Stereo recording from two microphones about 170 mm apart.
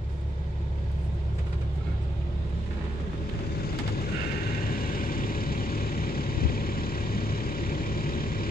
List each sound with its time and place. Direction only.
4.6 s vehicle: 60° left (ahead or behind)